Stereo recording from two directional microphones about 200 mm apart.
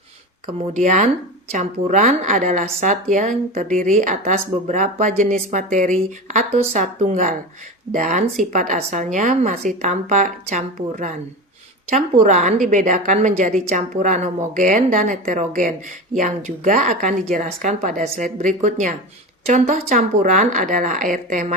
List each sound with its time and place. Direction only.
0.4 s speech: 40° right (ahead or behind)